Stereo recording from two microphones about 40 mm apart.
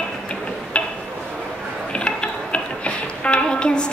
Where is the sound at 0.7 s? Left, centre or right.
Left.